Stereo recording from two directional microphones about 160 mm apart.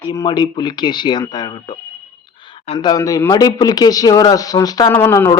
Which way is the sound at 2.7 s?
25° left (ahead or behind).